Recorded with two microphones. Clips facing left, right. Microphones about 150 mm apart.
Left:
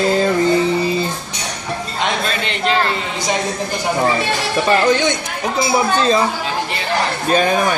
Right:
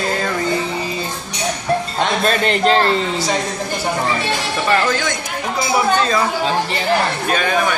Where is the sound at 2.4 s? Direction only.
40° right (ahead or behind).